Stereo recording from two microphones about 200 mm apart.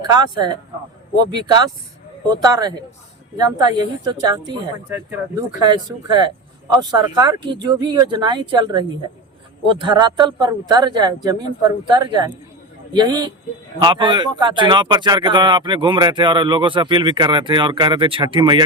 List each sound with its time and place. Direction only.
0.1 s speech: 20° right (ahead or behind)
2.3 s speech: 20° right (ahead or behind)
4.9 s speech: 10° right (ahead or behind)
5.5 s speech: 20° right (ahead or behind)